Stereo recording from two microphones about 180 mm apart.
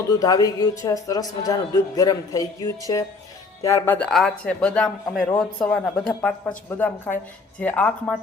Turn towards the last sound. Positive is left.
turn(degrees=5)  # may be behind; listen again after turning